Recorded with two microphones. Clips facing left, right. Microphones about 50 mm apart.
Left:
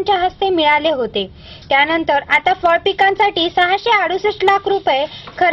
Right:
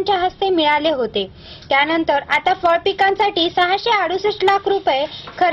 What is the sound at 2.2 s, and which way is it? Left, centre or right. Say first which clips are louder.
A woman's voice: left 2 dB; left.